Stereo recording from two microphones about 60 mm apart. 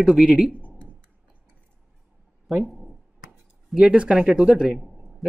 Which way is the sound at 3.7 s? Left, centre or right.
Centre.